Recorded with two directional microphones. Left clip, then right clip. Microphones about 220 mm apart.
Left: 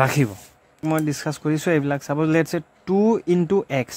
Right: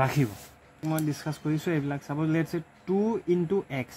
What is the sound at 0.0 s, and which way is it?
A man's voice, 40° left (ahead or behind).